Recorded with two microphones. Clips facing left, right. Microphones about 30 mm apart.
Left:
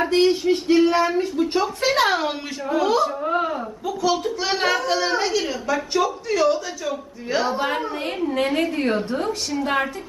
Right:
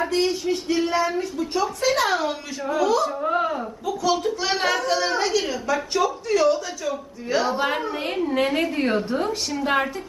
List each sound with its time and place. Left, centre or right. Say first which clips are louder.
0.0 s speech: left 4 dB; left
1.6 s speech: right 1 dB; left
3.2 s speech: even; centre